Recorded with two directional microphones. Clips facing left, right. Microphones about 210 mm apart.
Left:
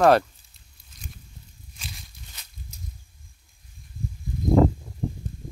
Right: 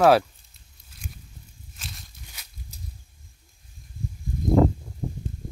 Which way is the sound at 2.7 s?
35° right (ahead or behind).